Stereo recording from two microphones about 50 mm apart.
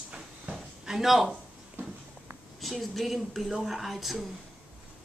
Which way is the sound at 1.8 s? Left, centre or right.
Right.